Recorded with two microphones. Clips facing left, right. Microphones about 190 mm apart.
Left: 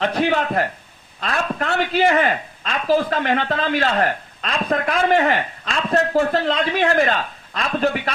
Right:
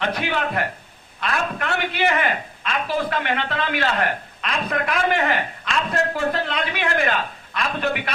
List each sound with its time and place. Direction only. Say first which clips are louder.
0.1 s a man's voice: left 5 dB; 35° left (ahead or behind)